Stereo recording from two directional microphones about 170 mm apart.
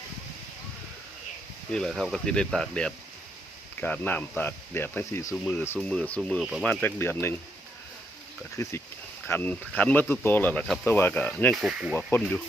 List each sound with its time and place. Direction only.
1.7 s speech: 5° left (ahead or behind)
5.3 s speech: centre (ahead or behind)
8.6 s speech: 15° left (ahead or behind)
11.5 s speech: 5° right (ahead or behind)